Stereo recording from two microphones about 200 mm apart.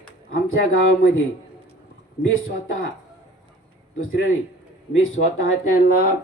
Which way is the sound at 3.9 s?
90° left.